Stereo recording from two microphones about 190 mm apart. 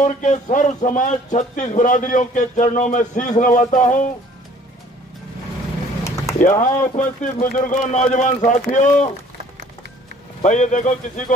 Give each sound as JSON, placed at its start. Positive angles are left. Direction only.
{"t": 0.0, "sound": "speech", "side_deg": 40}
{"t": 6.3, "sound": "speech", "side_deg": 40}
{"t": 10.4, "sound": "speech", "side_deg": 40}